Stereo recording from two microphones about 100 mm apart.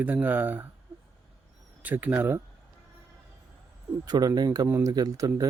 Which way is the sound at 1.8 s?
15° right (ahead or behind).